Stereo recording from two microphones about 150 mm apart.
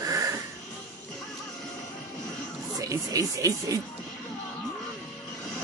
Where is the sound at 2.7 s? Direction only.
20° right (ahead or behind).